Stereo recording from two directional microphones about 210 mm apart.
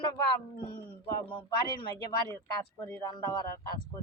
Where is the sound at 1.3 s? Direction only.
20° left (ahead or behind).